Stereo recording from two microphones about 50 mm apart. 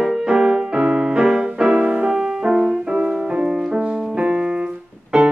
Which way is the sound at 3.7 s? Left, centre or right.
Right.